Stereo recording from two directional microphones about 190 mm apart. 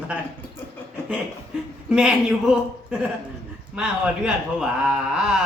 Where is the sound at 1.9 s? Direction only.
5° right (ahead or behind).